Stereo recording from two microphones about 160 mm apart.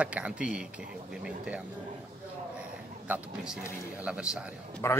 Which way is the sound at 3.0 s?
5° right (ahead or behind).